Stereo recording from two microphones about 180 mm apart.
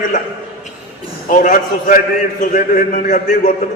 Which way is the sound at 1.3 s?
45° left (ahead or behind).